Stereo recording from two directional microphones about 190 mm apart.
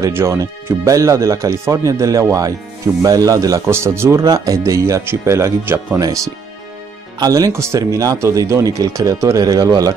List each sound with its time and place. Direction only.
0.0 s speech: 15° right (ahead or behind)